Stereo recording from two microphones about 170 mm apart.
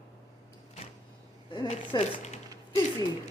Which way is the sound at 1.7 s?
35° left (ahead or behind).